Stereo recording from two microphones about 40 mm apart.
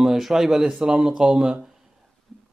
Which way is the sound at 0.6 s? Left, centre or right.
Centre.